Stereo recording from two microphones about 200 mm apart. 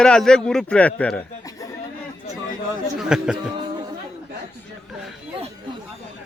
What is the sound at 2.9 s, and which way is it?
Speech, 5° right (ahead or behind).